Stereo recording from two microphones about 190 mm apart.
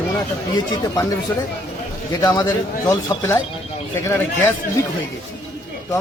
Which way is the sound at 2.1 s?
15° left (ahead or behind).